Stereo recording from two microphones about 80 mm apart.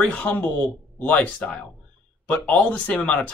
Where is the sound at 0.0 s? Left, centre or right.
Centre.